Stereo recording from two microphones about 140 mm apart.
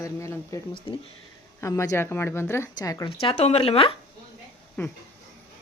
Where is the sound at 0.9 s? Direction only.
35° left (ahead or behind).